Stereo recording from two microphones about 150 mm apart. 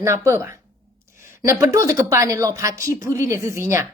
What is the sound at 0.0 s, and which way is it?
A woman's voice, 15° right (ahead or behind).